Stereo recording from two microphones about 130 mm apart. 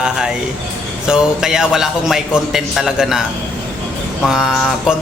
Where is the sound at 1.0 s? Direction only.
5° right (ahead or behind).